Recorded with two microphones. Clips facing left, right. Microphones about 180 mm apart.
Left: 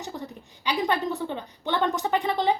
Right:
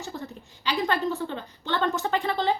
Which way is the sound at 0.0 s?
15° left (ahead or behind).